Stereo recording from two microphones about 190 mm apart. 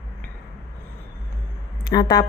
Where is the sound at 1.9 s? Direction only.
20° left (ahead or behind).